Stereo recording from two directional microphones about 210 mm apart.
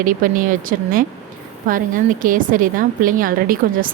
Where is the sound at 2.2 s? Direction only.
40° right (ahead or behind).